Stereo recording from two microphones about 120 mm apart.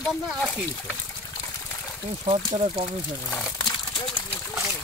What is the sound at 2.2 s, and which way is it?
Speech, 55° right (ahead or behind).